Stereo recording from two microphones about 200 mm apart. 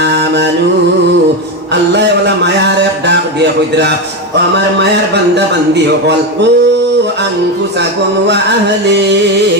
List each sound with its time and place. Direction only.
0.0 s mantra: 60° right (ahead or behind)
1.7 s a sound: 60° right (ahead or behind)
3.1 s a man's voice: 60° right (ahead or behind)